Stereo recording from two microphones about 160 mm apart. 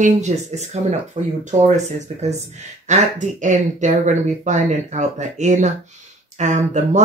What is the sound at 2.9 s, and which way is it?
Speech, 50° right (ahead or behind).